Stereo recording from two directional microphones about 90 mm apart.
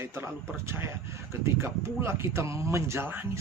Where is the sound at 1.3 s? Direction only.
30° right (ahead or behind).